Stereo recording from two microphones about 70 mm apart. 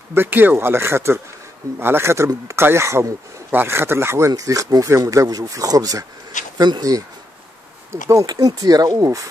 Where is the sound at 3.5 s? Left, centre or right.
Right.